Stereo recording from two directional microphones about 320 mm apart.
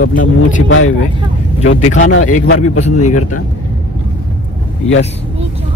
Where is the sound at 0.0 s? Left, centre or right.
Left.